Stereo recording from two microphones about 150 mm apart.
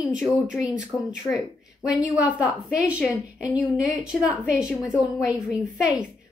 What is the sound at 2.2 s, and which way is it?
A woman's voice, 10° right (ahead or behind).